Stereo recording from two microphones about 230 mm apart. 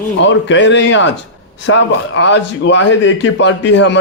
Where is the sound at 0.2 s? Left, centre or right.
Left.